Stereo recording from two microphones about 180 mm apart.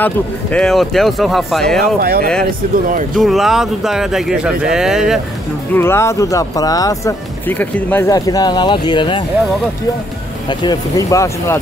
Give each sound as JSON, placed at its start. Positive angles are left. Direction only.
{"t": 0.0, "sound": "speech", "side_deg": 5}
{"t": 2.0, "sound": "speech", "side_deg": -55}
{"t": 3.2, "sound": "speech", "side_deg": 0}
{"t": 5.8, "sound": "speech", "side_deg": 15}
{"t": 10.6, "sound": "speech", "side_deg": 20}